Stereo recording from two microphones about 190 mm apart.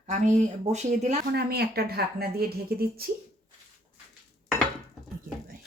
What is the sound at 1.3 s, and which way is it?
Speech, 55° right (ahead or behind).